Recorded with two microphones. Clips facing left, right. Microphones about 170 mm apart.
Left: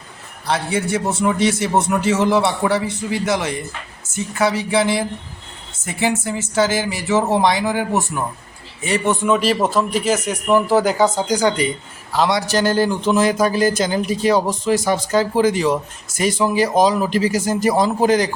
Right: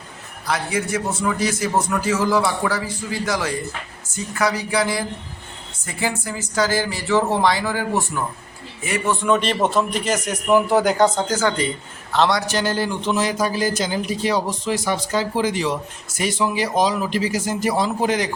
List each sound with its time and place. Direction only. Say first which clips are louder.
0.4 s speech: left 3 dB; 30° left (ahead or behind)
9.2 s speech: even; 5° left (ahead or behind)
12.5 s speech: left 5 dB; 45° left (ahead or behind)